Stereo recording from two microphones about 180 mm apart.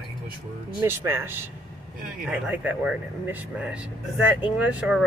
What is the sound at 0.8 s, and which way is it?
Speech, 15° right (ahead or behind).